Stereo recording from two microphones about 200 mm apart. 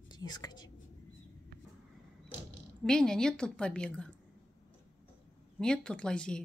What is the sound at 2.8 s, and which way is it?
A woman's voice, 5° left (ahead or behind).